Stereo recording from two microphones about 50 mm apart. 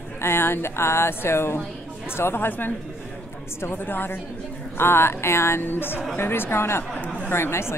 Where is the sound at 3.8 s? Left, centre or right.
Left.